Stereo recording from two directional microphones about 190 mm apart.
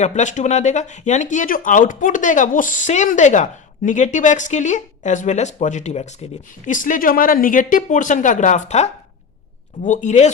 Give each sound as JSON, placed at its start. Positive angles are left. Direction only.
{"t": 0.0, "sound": "speech", "side_deg": 40}